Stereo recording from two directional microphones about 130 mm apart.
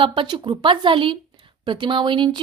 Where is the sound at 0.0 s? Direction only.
40° right (ahead or behind).